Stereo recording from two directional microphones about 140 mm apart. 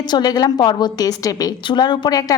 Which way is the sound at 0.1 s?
30° left (ahead or behind).